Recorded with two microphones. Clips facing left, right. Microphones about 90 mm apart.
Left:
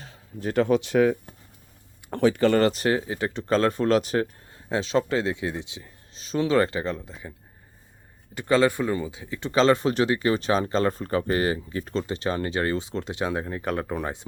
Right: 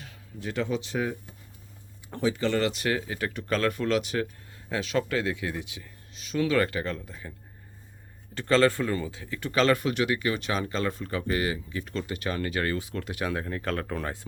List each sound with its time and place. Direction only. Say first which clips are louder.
0.0 s speech: left 6 dB; 35° left (ahead or behind); by 7.3 s 20° left (ahead or behind)
8.4 s speech: left 1 dB; 15° left (ahead or behind)